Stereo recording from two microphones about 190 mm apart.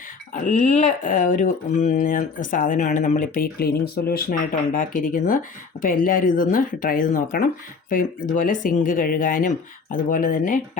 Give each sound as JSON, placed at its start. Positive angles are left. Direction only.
{"t": 0.3, "sound": "speech", "side_deg": 40}